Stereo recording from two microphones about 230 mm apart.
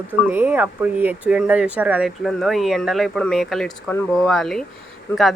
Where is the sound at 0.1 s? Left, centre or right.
Centre.